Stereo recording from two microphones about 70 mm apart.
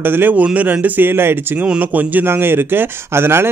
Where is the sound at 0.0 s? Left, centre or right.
Right.